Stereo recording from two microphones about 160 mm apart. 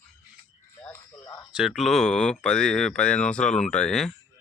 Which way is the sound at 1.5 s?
5° right (ahead or behind).